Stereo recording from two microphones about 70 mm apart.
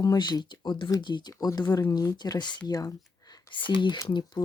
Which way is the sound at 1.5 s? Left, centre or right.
Left.